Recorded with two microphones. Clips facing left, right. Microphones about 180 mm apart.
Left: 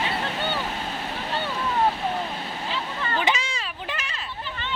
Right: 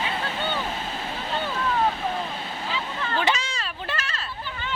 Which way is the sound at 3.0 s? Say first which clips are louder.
Even; 10° left (ahead or behind).